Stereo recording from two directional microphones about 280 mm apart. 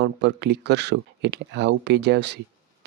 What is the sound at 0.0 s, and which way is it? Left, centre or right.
Speech, right.